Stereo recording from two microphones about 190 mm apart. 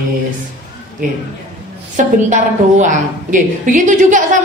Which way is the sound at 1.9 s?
40° right (ahead or behind).